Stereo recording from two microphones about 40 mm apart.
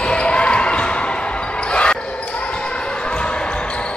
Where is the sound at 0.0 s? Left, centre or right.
Left.